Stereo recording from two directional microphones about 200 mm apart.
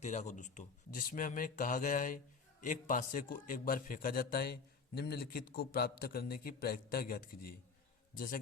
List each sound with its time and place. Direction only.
0.0 s a man's voice: 35° left (ahead or behind)